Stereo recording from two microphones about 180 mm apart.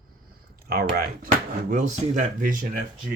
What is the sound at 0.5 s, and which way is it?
Speech, 55° right (ahead or behind).